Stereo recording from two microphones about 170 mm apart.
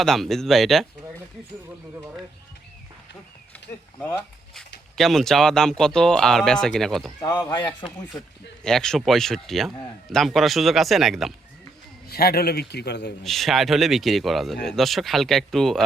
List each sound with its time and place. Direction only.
0.0 s a man's voice: centre (ahead or behind)
4.9 s a man's voice: centre (ahead or behind)
7.2 s speech: 20° left (ahead or behind)
7.7 s a man's voice: 5° left (ahead or behind)
12.0 s a man's voice: 65° left (ahead or behind); by 13.1 s 80° left
13.2 s a man's voice: centre (ahead or behind)